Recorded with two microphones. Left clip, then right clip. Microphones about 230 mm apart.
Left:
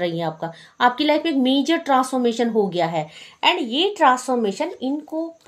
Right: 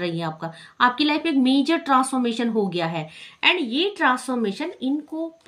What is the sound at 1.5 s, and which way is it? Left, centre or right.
A woman's voice, centre.